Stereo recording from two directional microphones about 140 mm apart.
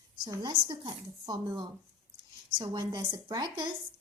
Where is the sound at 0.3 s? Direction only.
30° right (ahead or behind).